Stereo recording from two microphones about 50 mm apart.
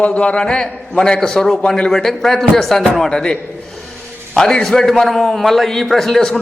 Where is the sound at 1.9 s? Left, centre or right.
Centre.